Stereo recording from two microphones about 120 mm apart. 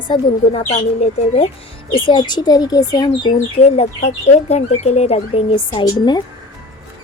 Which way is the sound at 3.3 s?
60° left (ahead or behind).